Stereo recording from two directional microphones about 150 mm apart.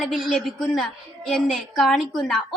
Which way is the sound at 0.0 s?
Centre (ahead or behind).